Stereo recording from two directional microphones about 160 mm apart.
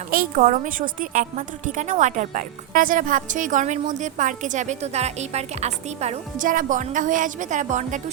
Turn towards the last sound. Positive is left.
turn(degrees=-50)  # may be behind; listen again after turning